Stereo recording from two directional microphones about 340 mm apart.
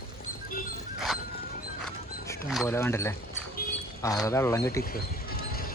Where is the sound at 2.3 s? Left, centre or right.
Centre.